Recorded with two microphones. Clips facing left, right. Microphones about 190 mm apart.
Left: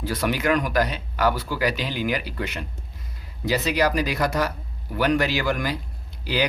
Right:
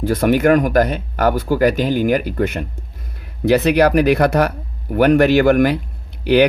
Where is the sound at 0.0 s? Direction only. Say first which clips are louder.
Right 10 dB; 50° right (ahead or behind).